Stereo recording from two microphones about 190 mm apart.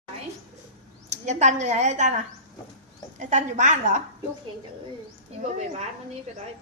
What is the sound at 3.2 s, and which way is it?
Speech, 40° right (ahead or behind).